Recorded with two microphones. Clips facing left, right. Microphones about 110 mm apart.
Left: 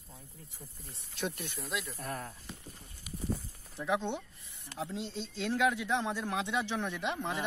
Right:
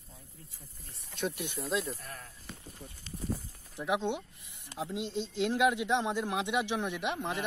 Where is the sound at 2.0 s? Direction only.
45° left (ahead or behind).